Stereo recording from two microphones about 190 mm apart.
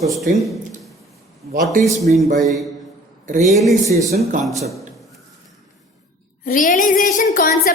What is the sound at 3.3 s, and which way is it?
Speech, 40° right (ahead or behind).